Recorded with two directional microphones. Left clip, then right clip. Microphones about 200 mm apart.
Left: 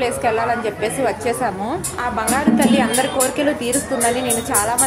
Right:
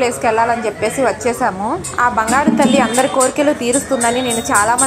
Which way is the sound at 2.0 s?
15° right (ahead or behind).